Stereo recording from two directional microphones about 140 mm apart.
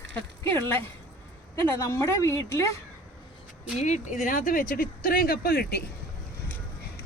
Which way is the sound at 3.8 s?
55° left (ahead or behind).